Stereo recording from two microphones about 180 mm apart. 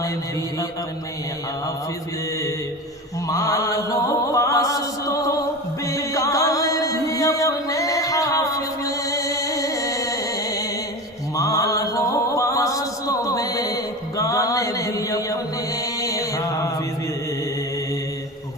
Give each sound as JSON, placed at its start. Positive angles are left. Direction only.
{"t": 3.2, "sound": "chant", "side_deg": 20}
{"t": 5.8, "sound": "music", "side_deg": 20}
{"t": 11.3, "sound": "a sound", "side_deg": 20}